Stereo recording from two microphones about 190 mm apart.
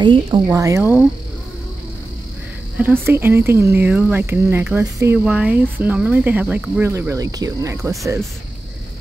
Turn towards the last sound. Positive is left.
turn(degrees=-15)  # may be behind; listen again after turning